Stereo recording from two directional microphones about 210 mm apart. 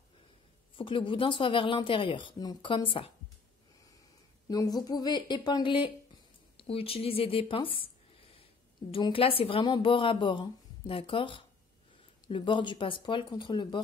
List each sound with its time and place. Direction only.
0.7 s a woman's voice: 25° left (ahead or behind)
4.5 s a woman's voice: 15° left (ahead or behind)
8.9 s a woman's voice: 25° left (ahead or behind)